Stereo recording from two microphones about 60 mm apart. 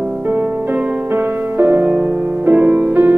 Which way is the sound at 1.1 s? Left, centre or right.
Right.